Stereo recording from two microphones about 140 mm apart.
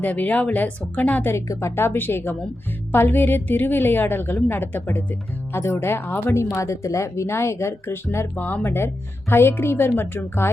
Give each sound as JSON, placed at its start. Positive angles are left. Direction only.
{"t": 0.0, "sound": "speech", "side_deg": 10}